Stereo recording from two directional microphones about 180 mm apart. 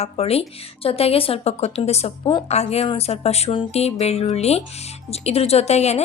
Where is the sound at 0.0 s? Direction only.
35° left (ahead or behind).